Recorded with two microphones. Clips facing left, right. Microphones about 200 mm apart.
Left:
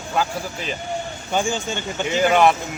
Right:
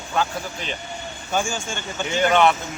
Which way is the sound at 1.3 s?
20° left (ahead or behind).